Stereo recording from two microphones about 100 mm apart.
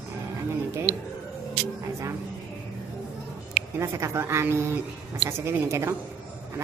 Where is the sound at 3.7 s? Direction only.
30° right (ahead or behind).